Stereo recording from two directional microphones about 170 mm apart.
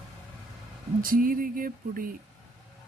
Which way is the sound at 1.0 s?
55° right (ahead or behind).